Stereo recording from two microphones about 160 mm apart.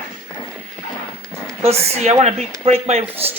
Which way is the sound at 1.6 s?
40° right (ahead or behind).